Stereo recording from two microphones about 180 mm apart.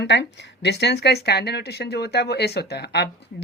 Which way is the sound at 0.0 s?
70° left (ahead or behind).